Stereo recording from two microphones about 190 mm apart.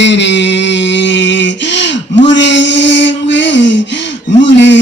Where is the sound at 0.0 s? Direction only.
70° left (ahead or behind).